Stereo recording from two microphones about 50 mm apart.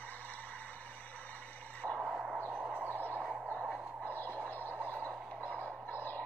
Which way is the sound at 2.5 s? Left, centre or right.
Right.